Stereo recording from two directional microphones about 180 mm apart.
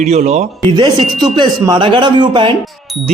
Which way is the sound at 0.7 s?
25° right (ahead or behind).